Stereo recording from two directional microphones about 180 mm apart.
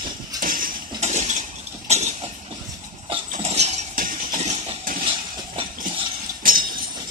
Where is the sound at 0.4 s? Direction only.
50° right (ahead or behind).